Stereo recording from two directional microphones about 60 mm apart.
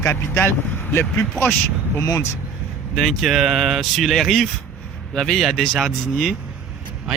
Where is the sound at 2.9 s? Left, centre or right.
Centre.